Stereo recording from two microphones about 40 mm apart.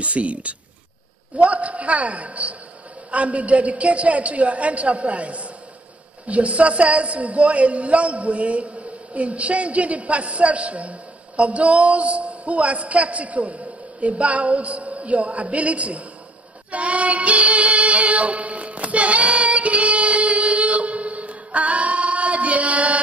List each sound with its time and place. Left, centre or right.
0.0 s a man's voice: right
16.7 s child singing: right